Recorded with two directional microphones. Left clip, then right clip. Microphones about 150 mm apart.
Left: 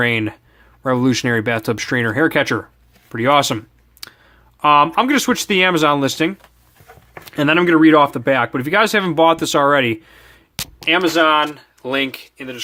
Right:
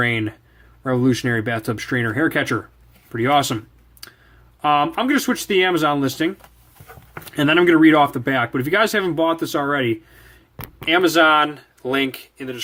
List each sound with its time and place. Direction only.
0.0 s speech: 35° left (ahead or behind)
4.0 s clicking: 35° left (ahead or behind)
4.6 s speech: 35° left (ahead or behind)
7.3 s speech: 25° left (ahead or behind); by 10.0 s 40° left (ahead or behind)
10.8 s speech: 20° left (ahead or behind)